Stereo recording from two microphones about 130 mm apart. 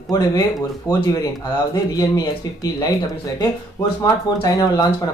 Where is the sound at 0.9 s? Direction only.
30° left (ahead or behind).